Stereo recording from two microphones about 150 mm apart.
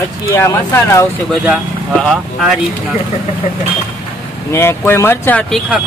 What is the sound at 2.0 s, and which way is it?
Speech, centre (ahead or behind).